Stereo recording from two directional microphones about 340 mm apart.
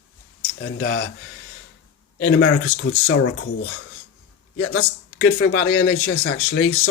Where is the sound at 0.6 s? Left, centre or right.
Left.